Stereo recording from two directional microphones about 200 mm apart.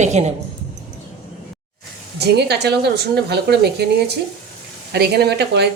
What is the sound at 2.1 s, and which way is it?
A woman's voice, 55° right (ahead or behind).